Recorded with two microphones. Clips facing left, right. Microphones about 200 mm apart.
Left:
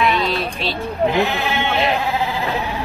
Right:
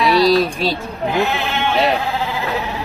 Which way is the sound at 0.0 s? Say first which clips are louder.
Right 6 dB; 35° right (ahead or behind).